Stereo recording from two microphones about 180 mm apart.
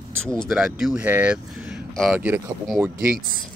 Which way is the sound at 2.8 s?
15° right (ahead or behind).